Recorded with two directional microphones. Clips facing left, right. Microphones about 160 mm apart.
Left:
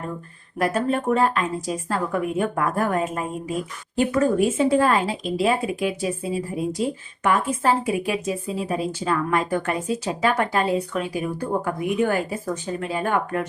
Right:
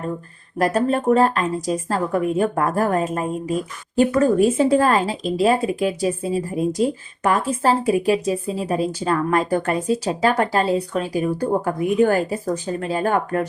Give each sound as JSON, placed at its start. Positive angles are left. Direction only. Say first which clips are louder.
{"t": 0.6, "sound": "a woman's voice", "louder": "right 3 dB", "side_deg": -35}